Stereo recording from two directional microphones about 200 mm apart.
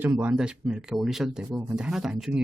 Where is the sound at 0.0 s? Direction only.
10° right (ahead or behind).